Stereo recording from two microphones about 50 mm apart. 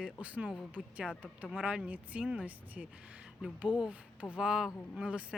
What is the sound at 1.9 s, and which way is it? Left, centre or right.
Speech, right.